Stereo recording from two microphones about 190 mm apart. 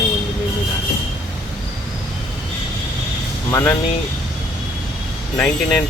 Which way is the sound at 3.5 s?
15° left (ahead or behind).